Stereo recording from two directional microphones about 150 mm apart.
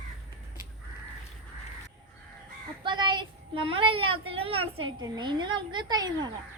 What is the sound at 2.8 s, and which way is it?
A child's voice, 30° right (ahead or behind).